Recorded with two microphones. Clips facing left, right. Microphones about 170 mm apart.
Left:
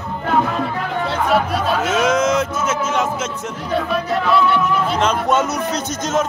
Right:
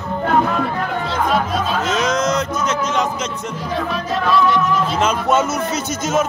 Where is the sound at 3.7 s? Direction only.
65° left (ahead or behind).